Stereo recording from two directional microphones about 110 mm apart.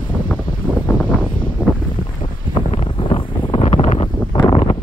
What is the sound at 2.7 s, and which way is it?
Wind noise, 55° left (ahead or behind).